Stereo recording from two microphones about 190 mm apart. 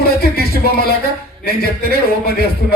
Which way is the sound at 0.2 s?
55° left (ahead or behind).